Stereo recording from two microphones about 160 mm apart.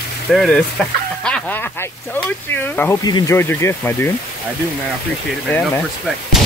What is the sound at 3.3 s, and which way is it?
Speech, 15° left (ahead or behind).